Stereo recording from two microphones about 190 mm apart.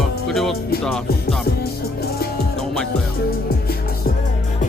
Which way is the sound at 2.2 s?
55° left (ahead or behind).